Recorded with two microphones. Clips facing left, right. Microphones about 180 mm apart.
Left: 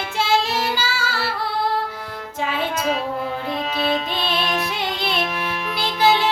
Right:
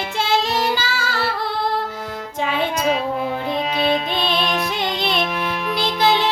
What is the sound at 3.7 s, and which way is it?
Music, 15° right (ahead or behind).